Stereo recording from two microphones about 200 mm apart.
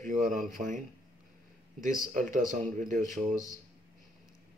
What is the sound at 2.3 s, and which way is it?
Speech, 40° right (ahead or behind).